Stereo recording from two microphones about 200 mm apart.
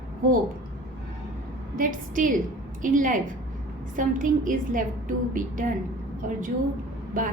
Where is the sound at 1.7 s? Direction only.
45° right (ahead or behind).